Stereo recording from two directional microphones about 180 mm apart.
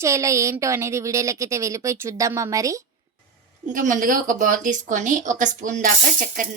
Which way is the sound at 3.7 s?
45° right (ahead or behind).